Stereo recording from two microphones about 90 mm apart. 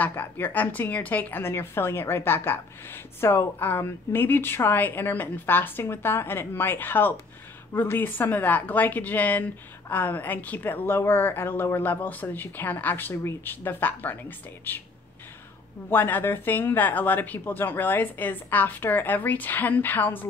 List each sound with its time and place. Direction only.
0.0 s a woman's voice: 20° left (ahead or behind)
15.9 s a woman's voice: 20° left (ahead or behind)